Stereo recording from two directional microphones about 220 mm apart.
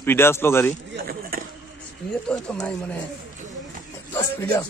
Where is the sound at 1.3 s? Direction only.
40° right (ahead or behind).